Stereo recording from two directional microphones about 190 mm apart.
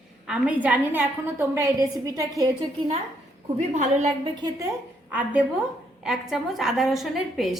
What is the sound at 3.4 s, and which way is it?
A woman's voice, 35° right (ahead or behind).